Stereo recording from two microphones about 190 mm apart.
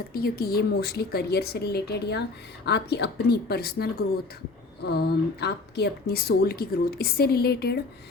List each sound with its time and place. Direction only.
0.1 s speech: 50° left (ahead or behind)